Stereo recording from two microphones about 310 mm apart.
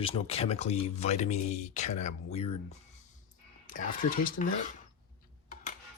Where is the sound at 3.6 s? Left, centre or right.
Left.